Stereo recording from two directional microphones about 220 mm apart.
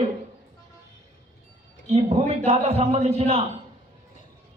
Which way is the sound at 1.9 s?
30° right (ahead or behind).